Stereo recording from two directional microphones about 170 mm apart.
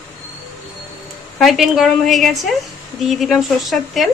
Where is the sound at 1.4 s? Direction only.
Centre (ahead or behind).